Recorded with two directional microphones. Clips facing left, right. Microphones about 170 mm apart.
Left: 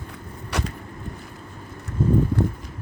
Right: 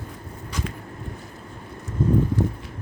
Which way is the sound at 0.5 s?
70° left (ahead or behind).